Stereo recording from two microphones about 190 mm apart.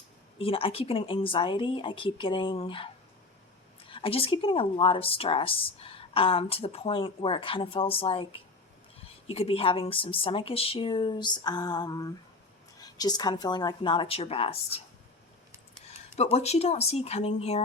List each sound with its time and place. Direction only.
0.3 s a woman's voice: 30° left (ahead or behind)
15.9 s speech: 35° left (ahead or behind)